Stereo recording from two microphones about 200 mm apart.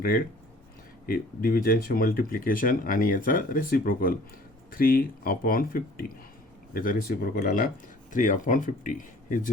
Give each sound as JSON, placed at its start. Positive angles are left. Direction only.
{"t": 1.0, "sound": "speech", "side_deg": 45}